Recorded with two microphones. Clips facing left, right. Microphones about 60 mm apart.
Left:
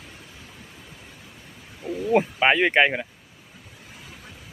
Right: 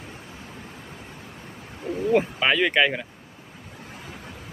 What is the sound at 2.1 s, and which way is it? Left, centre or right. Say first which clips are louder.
Speech: left 2 dB; left.